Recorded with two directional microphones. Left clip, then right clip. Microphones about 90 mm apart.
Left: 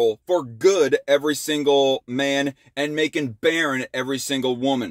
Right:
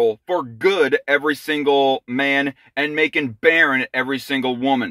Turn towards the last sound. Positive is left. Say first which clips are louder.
# right 3 dB
turn(degrees=35)  # may be behind; listen again after turning